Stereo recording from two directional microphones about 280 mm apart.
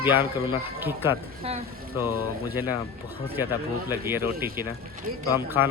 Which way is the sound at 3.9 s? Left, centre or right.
Centre.